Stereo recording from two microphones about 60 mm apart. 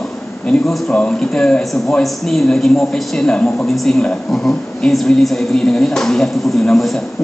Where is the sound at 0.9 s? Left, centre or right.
Centre.